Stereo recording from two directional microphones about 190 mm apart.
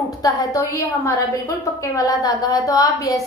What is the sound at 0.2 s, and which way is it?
A woman's voice, 15° left (ahead or behind).